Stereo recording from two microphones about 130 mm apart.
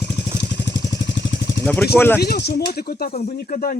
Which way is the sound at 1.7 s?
15° left (ahead or behind).